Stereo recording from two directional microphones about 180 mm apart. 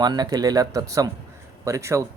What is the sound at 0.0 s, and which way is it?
A man's voice, 25° right (ahead or behind).